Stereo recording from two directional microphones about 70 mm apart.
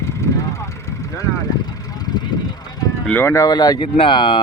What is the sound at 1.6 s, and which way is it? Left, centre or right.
Vehicle, left.